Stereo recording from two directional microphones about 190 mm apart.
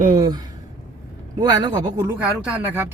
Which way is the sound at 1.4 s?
20° right (ahead or behind).